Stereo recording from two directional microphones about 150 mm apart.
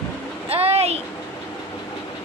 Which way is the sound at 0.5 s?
45° right (ahead or behind).